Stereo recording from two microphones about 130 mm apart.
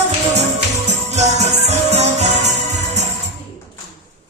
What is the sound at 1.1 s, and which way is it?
Music, 60° right (ahead or behind).